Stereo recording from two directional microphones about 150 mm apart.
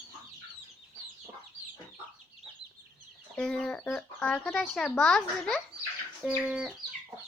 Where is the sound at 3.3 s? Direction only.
5° left (ahead or behind).